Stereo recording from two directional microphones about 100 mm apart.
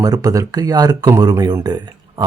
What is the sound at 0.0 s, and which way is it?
Speech, 35° right (ahead or behind).